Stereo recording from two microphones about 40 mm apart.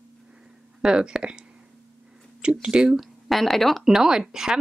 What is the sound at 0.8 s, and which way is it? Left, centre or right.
Speech, centre.